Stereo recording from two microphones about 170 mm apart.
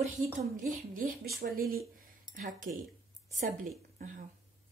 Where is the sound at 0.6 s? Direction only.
50° right (ahead or behind).